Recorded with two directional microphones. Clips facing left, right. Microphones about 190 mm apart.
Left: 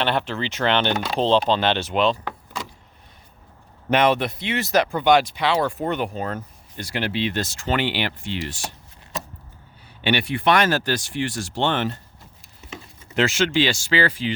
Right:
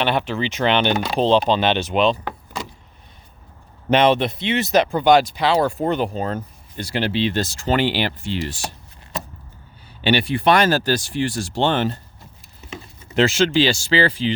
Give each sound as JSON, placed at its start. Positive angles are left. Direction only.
{"t": 0.0, "sound": "speech", "side_deg": -15}
{"t": 3.8, "sound": "speech", "side_deg": -25}
{"t": 10.0, "sound": "speech", "side_deg": -30}